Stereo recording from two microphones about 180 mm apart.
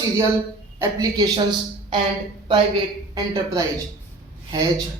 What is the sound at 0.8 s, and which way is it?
A woman's voice, 20° right (ahead or behind).